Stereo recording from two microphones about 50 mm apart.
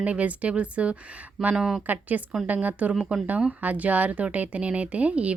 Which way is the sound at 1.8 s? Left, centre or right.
Right.